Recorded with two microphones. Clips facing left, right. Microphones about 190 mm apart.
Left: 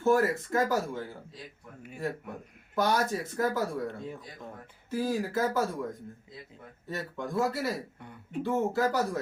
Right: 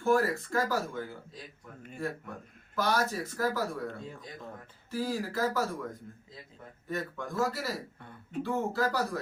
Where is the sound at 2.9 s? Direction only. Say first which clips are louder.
Left 2 dB; 20° left (ahead or behind).